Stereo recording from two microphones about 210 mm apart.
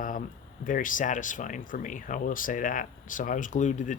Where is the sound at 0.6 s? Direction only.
40° left (ahead or behind).